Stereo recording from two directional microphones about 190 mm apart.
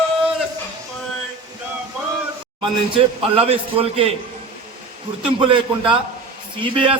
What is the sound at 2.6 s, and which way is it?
A man's voice, 30° right (ahead or behind).